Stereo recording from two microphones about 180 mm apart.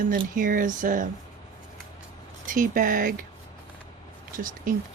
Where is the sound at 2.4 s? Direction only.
50° right (ahead or behind).